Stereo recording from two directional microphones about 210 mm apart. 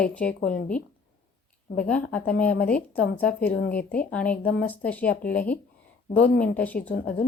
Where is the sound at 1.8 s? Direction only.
5° left (ahead or behind).